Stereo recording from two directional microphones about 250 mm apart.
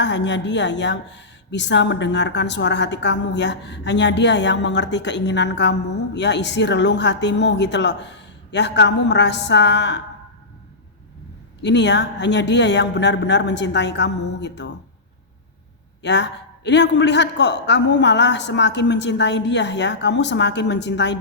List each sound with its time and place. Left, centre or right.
0.0 s speech: left
11.6 s speech: left
16.0 s speech: left